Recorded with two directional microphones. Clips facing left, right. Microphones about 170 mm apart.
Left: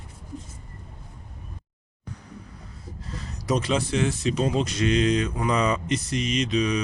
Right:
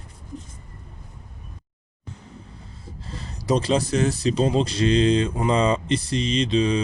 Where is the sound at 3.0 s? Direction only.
30° right (ahead or behind).